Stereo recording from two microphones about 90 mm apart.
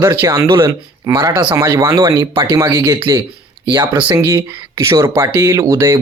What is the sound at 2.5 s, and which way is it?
Speech, 40° right (ahead or behind).